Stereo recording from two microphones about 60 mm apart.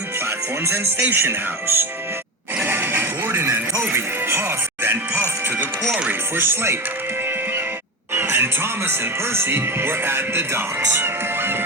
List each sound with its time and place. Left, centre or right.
0.3 s speech: right
2.6 s neigh: right
3.4 s music: right
6.1 s speech: right
8.1 s speech: right